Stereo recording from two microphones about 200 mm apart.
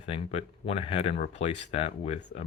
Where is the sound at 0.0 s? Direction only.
30° left (ahead or behind).